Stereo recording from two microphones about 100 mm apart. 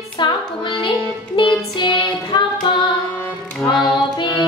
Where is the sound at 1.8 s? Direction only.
55° left (ahead or behind).